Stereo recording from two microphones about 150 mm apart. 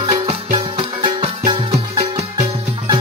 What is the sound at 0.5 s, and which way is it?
Music, 40° right (ahead or behind).